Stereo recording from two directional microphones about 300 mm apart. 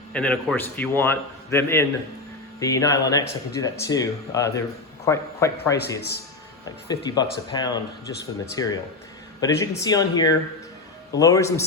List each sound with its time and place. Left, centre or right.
0.1 s speech: centre
6.0 s a man's voice: left
6.7 s speech: centre